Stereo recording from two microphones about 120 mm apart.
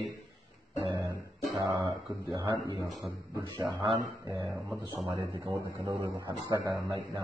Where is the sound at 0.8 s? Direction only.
30° right (ahead or behind).